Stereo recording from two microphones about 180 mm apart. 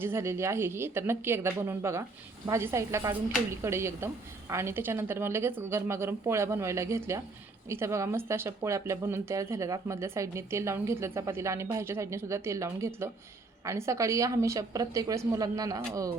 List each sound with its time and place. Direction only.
0.0 s speech: 15° right (ahead or behind)